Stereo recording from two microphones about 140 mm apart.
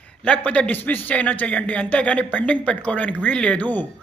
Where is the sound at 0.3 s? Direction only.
10° left (ahead or behind).